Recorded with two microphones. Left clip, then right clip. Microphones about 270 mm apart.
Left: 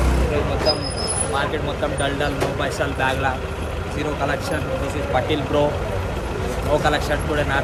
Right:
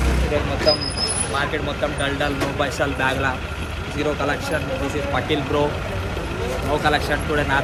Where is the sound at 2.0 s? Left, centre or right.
Centre.